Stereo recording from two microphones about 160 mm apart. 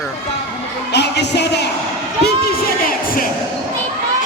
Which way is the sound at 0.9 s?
90° left.